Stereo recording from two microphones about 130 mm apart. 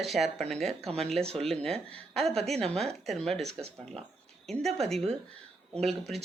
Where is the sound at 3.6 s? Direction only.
50° right (ahead or behind).